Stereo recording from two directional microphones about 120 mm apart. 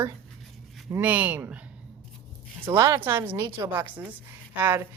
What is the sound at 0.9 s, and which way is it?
Speech, 15° right (ahead or behind).